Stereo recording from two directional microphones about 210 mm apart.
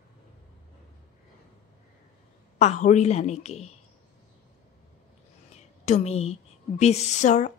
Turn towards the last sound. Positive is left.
turn(degrees=35)  # may be behind; listen again after turning